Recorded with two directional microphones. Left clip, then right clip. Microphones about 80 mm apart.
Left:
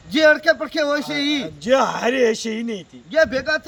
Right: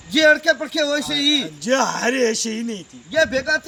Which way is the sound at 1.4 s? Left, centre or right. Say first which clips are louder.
Left 2 dB; left.